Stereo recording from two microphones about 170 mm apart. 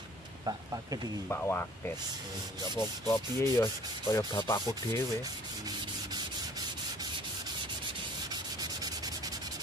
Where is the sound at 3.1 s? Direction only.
15° left (ahead or behind).